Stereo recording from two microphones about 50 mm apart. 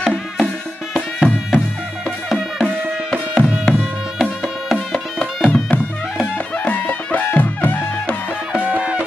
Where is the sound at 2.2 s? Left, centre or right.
Centre.